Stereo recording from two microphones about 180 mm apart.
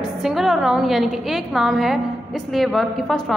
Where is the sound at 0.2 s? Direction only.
Centre (ahead or behind).